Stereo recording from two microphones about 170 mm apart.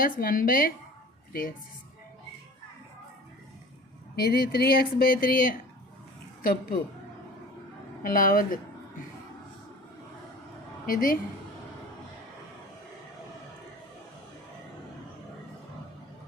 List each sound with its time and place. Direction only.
0.0 s a woman's voice: 55° left (ahead or behind)
4.1 s speech: 65° left (ahead or behind)
8.0 s speech: 55° left (ahead or behind)
10.8 s speech: 55° left (ahead or behind)